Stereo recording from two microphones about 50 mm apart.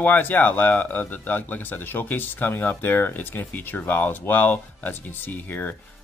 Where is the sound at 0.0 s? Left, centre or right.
Left.